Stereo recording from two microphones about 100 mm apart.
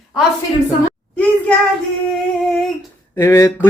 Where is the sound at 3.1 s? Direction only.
30° left (ahead or behind).